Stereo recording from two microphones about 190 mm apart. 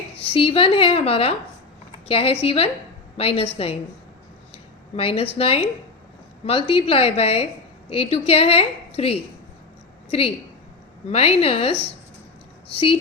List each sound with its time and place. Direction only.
0.2 s a woman's voice: 30° left (ahead or behind)